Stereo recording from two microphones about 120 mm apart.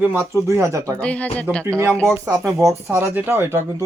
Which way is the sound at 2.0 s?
25° right (ahead or behind).